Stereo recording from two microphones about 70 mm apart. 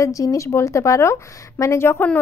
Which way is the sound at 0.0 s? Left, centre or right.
Left.